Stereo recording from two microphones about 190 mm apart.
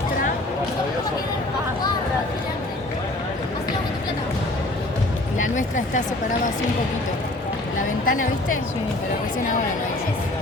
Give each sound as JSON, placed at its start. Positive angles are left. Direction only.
{"t": 5.5, "sound": "speech", "side_deg": 40}
{"t": 8.0, "sound": "speech", "side_deg": 45}